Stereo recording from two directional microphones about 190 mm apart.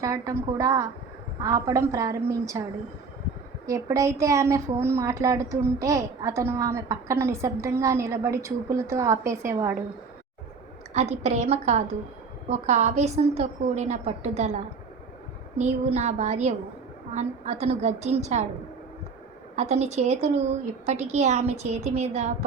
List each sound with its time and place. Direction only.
0.0 s a woman's voice: 15° right (ahead or behind)
3.7 s a woman's voice: 15° right (ahead or behind)
10.9 s a woman's voice: 35° right (ahead or behind)
19.5 s a woman's voice: 35° right (ahead or behind)